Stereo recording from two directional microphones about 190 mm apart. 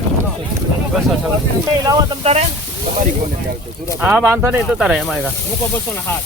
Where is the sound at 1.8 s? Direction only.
20° right (ahead or behind).